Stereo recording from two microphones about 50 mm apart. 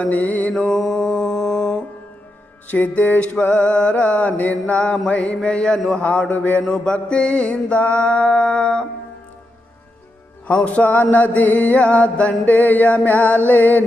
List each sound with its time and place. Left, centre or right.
0.0 s music: left
0.5 s mantra: centre
2.6 s music: left
3.4 s mantra: left
6.0 s music: left
6.6 s mantra: centre
10.4 s music: left